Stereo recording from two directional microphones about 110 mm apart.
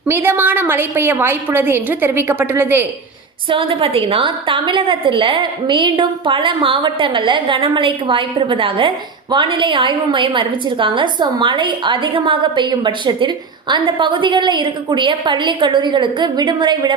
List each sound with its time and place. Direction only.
0.1 s a woman's voice: 20° right (ahead or behind)
3.5 s a woman's voice: 55° right (ahead or behind)